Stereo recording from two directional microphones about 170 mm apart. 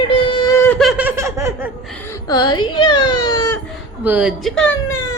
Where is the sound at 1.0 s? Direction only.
15° right (ahead or behind).